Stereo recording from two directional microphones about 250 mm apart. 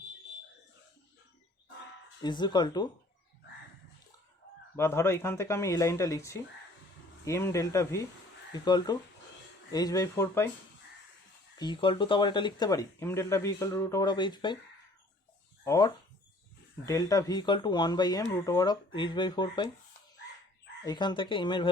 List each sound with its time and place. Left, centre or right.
2.2 s speech: centre
4.8 s speech: centre
11.5 s speech: centre
15.6 s speech: centre
20.8 s speech: centre